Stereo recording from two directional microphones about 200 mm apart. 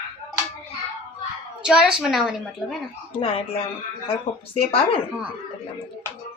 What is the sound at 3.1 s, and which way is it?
Speech, 25° left (ahead or behind).